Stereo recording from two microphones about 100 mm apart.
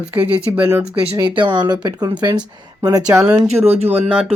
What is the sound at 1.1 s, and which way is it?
Speech, 50° right (ahead or behind).